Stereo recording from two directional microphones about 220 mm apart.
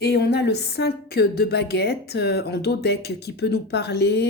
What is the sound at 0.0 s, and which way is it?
A woman's voice, 45° left (ahead or behind).